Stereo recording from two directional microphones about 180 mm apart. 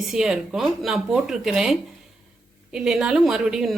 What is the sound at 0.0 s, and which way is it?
A woman's voice, centre (ahead or behind).